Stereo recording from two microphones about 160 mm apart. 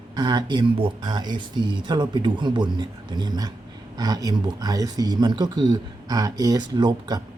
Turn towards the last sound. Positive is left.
turn(degrees=-25)  # may be behind; listen again after turning